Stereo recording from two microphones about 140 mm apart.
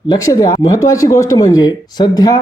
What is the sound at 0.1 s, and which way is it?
Speech, 30° left (ahead or behind).